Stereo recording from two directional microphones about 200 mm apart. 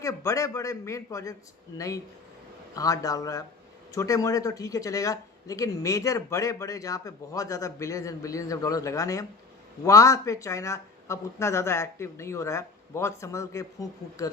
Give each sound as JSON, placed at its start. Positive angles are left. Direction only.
{"t": 0.0, "sound": "speech", "side_deg": 15}
{"t": 2.7, "sound": "speech", "side_deg": 15}